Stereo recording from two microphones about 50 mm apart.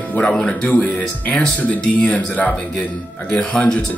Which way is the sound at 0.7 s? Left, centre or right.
Left.